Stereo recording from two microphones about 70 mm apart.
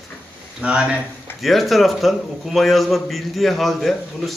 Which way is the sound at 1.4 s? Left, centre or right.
Centre.